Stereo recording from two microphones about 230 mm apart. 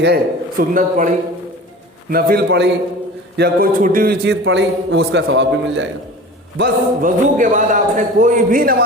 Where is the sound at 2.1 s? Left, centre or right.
Right.